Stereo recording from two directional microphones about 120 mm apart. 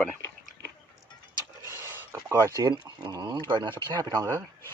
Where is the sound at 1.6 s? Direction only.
20° right (ahead or behind).